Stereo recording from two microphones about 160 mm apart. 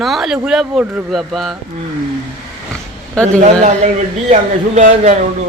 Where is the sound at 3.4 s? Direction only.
45° right (ahead or behind).